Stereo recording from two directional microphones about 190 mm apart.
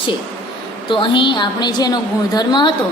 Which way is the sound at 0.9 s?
25° left (ahead or behind).